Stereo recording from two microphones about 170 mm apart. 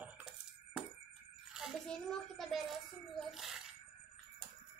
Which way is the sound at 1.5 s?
Centre (ahead or behind).